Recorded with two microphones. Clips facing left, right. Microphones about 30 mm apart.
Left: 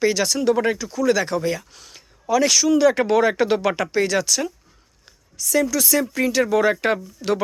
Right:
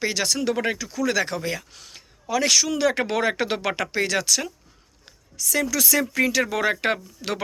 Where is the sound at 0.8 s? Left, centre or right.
Right.